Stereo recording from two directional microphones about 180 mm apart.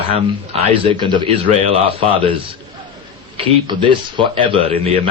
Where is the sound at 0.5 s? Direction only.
30° right (ahead or behind).